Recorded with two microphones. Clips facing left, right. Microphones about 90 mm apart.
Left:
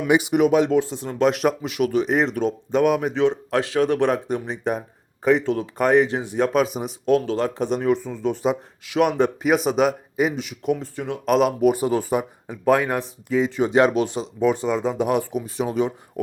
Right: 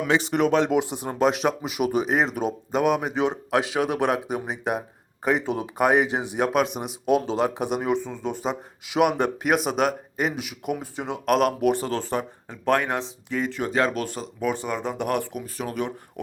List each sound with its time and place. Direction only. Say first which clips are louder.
0.1 s speech: left 4 dB; 10° left (ahead or behind)
0.7 s speech: left 3 dB; 10° right (ahead or behind)
1.2 s speech: left 2 dB; centre (ahead or behind)
3.2 s speech: left 3 dB; 15° right (ahead or behind)
6.4 s speech: left 3 dB; 5° right (ahead or behind)
7.0 s speech: left 2 dB; 15° right (ahead or behind)
10.9 s speech: left 2 dB; 20° right (ahead or behind)
11.3 s speech: left 3 dB; centre (ahead or behind)
15.6 s speech: left 6 dB; 20° left (ahead or behind)